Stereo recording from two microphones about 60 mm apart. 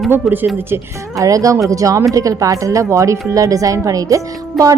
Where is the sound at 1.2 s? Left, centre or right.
Right.